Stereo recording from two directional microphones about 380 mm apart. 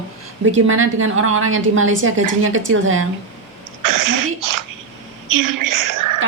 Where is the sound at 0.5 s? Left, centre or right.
Right.